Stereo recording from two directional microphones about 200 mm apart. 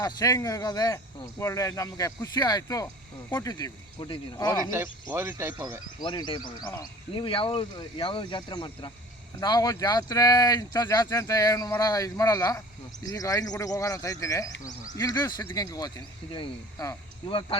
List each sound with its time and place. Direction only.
0.0 s speech: 20° left (ahead or behind)
4.7 s speech: 10° right (ahead or behind)
6.0 s speech: 20° left (ahead or behind)